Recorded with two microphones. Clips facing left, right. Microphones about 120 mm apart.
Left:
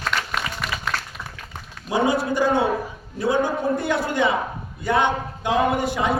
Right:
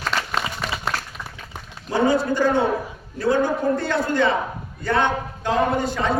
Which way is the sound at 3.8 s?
15° left (ahead or behind).